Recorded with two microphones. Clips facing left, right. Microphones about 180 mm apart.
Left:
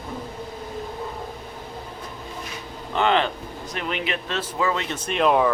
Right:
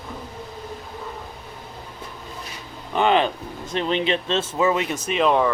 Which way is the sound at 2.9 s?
15° right (ahead or behind).